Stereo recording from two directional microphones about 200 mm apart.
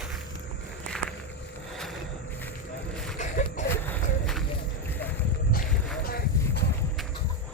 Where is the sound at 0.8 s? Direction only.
5° left (ahead or behind).